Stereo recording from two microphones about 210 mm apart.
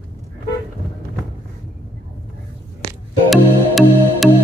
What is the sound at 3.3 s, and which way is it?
Music, centre (ahead or behind).